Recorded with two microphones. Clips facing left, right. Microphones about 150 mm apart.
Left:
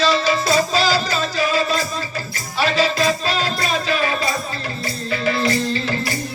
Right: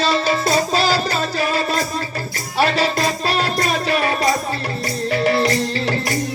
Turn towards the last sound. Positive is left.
turn(degrees=-65)  # may be behind; listen again after turning